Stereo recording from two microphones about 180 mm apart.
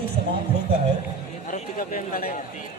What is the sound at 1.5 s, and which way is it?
Speech, 50° left (ahead or behind).